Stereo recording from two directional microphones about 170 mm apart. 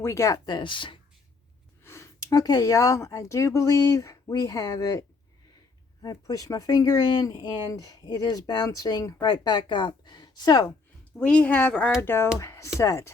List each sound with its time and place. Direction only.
0.0 s speech: 20° left (ahead or behind)
1.8 s speech: 15° left (ahead or behind)
11.2 s a woman's voice: 5° left (ahead or behind)